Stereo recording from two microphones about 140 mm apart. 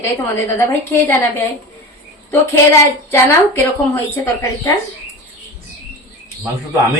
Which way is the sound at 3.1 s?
15° left (ahead or behind).